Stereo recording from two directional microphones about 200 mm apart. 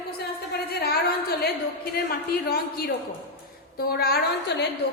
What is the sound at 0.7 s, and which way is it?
Speech, 50° left (ahead or behind).